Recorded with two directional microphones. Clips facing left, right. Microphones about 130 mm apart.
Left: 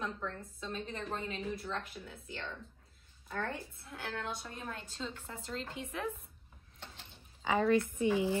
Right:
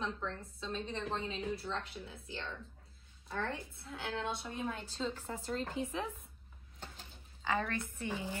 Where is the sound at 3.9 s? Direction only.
25° right (ahead or behind).